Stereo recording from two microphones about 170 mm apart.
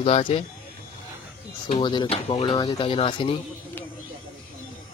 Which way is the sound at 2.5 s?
25° left (ahead or behind).